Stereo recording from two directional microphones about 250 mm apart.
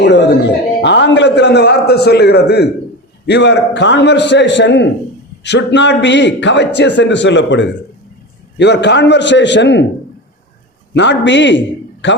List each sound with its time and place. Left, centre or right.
0.0 s a man's voice: left
10.9 s a man's voice: left